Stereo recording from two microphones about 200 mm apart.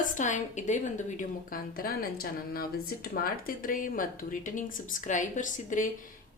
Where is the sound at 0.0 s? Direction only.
40° left (ahead or behind).